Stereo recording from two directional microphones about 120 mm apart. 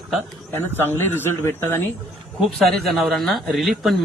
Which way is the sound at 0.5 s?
20° left (ahead or behind).